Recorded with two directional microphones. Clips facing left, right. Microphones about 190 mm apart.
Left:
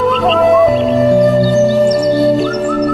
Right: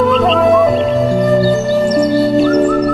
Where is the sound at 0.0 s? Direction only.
Centre (ahead or behind).